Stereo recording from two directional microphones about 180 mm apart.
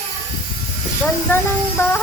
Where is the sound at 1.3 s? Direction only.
10° left (ahead or behind).